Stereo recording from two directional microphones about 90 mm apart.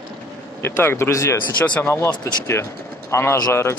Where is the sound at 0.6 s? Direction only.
25° left (ahead or behind).